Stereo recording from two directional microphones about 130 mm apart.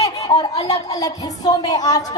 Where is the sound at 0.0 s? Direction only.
30° left (ahead or behind).